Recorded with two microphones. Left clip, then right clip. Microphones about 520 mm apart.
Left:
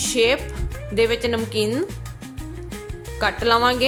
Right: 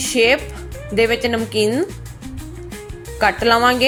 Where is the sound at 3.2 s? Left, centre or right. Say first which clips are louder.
Right 4 dB; left.